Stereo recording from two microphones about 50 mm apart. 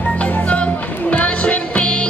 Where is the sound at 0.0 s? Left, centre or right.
Left.